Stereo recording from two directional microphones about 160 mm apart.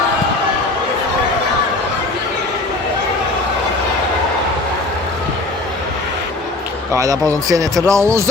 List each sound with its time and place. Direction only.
6.9 s speech: 20° right (ahead or behind)